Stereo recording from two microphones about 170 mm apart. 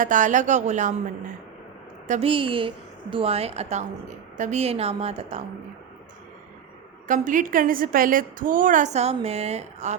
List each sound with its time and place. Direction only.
0.0 s a woman's voice: 50° right (ahead or behind)
2.0 s a woman's voice: 35° right (ahead or behind)
7.1 s a woman's voice: 50° right (ahead or behind)